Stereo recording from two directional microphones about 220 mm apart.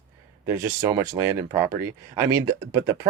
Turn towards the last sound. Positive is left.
turn(degrees=-15)  # may be behind; listen again after turning